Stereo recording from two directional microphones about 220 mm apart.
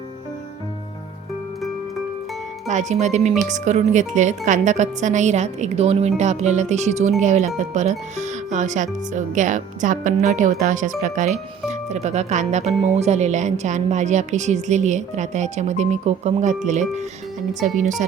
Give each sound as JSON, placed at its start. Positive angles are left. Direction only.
{"t": 2.6, "sound": "speech", "side_deg": -30}